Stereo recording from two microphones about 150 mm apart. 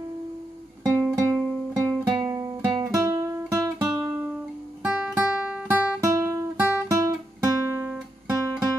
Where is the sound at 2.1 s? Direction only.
25° right (ahead or behind).